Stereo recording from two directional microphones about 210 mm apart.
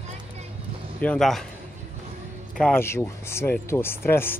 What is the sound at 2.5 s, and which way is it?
Speech, 10° left (ahead or behind).